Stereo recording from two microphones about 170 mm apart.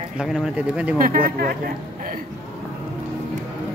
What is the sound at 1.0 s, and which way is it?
Speech, 60° right (ahead or behind).